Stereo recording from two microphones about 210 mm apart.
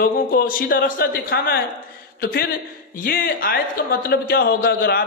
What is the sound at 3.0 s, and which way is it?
A man's voice, 45° left (ahead or behind).